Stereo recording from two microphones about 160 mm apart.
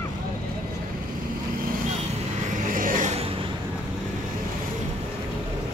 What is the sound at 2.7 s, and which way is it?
Vehicle, 60° right (ahead or behind).